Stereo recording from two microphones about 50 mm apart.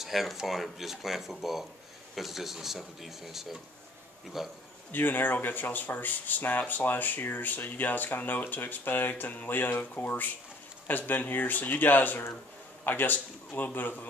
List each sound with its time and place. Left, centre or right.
0.0 s speech: centre
4.9 s speech: left